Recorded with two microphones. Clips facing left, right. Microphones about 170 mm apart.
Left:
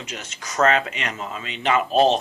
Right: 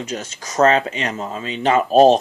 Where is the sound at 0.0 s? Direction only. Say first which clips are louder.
Right 8 dB; 40° right (ahead or behind).